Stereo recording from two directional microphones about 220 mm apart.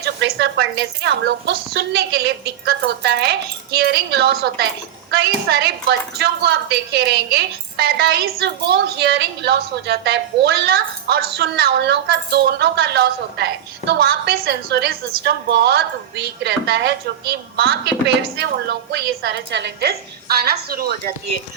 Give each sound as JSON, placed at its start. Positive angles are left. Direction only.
{"t": 0.0, "sound": "a woman's voice", "side_deg": -50}